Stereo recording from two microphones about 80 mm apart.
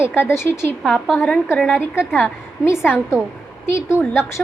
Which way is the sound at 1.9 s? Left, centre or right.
Left.